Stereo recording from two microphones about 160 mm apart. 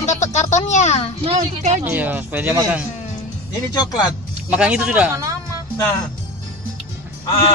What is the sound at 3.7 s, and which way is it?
Speech, 25° left (ahead or behind).